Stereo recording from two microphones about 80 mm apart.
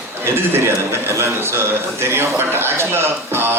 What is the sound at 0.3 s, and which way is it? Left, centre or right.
A man's voice, right.